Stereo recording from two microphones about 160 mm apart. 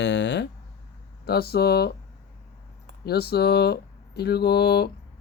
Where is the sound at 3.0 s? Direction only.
85° left.